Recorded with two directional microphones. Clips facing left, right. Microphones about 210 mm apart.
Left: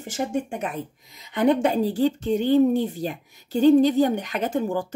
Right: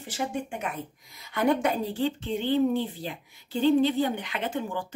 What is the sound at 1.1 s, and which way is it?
Speech, 20° left (ahead or behind).